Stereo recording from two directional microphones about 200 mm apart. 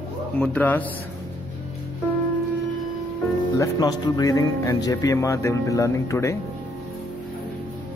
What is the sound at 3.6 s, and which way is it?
Speech, 20° left (ahead or behind).